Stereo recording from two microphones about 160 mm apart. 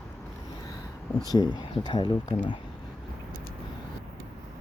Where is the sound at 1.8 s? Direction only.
30° left (ahead or behind).